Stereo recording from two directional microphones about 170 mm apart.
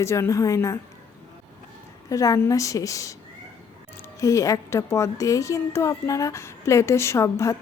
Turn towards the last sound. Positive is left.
turn(degrees=20)  # may be behind; listen again after turning